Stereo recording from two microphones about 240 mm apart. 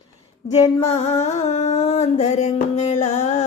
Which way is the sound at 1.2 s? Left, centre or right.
Left.